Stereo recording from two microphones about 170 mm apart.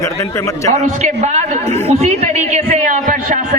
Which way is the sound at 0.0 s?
15° left (ahead or behind).